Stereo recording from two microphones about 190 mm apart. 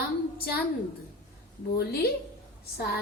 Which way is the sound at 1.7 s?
55° left (ahead or behind).